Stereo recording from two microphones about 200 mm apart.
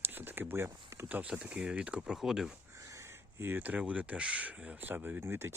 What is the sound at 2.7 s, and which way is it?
Speech, 15° right (ahead or behind).